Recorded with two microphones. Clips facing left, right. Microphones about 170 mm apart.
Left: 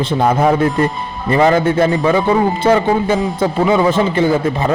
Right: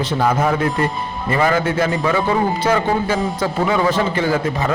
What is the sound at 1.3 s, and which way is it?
A man's voice, 25° left (ahead or behind).